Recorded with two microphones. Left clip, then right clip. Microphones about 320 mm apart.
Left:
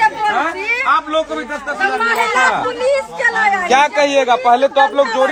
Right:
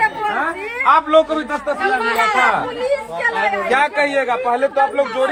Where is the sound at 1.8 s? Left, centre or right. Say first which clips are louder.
Left 2 dB; left.